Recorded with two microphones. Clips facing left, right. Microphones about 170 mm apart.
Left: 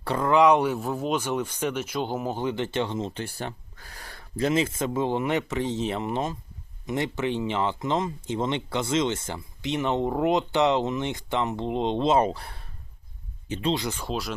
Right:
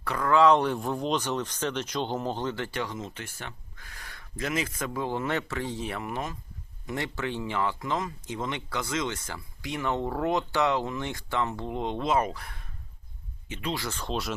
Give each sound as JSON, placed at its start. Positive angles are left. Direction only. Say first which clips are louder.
{"t": 0.0, "sound": "speech", "louder": "left 2 dB", "side_deg": 25}